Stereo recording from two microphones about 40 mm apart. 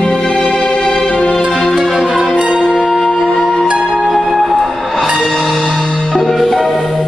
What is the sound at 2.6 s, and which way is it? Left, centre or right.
Music, centre.